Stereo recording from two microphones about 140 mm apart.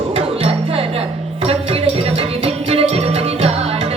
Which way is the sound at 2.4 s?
45° right (ahead or behind).